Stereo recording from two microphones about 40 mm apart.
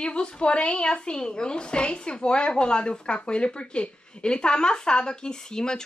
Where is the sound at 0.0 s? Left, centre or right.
Left.